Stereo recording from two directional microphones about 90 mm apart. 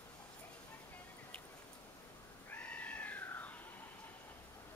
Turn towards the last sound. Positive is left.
turn(degrees=20)  # may be behind; listen again after turning